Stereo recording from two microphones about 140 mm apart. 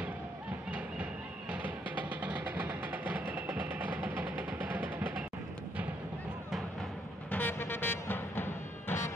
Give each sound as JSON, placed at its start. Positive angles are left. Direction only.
{"t": 0.7, "sound": "music", "side_deg": -10}
{"t": 2.0, "sound": "music", "side_deg": -10}
{"t": 7.2, "sound": "music", "side_deg": 15}